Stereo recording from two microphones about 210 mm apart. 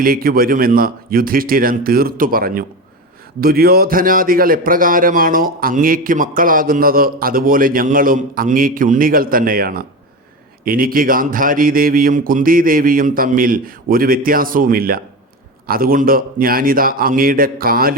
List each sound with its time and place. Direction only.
0.0 s a man's voice: 45° right (ahead or behind)